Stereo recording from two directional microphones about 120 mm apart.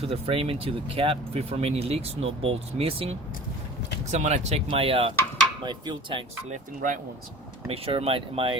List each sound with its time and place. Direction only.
0.0 s speech: 55° right (ahead or behind)
4.1 s speech: 70° right (ahead or behind); by 5.1 s 50° right (ahead or behind)
5.6 s speech: 40° right (ahead or behind)
6.5 s speech: 90° right
7.7 s speech: 55° right (ahead or behind)